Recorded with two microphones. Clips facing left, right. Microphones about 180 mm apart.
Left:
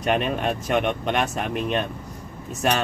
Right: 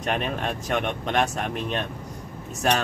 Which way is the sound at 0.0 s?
Centre (ahead or behind).